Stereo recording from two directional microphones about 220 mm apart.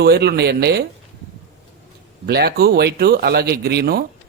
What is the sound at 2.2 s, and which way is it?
Speech, 45° right (ahead or behind).